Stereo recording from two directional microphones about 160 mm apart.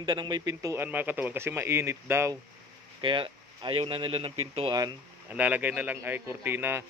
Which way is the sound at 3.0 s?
30° right (ahead or behind).